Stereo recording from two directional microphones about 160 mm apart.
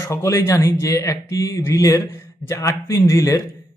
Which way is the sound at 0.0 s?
20° left (ahead or behind).